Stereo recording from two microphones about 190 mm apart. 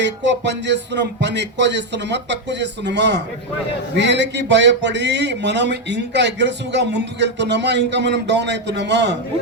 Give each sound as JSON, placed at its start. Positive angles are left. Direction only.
{"t": 0.0, "sound": "a man's voice", "side_deg": -65}